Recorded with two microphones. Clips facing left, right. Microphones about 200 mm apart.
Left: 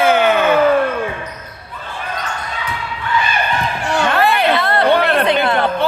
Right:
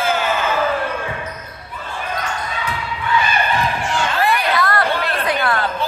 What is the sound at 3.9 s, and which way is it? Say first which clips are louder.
Music: left 6 dB; 65° left (ahead or behind).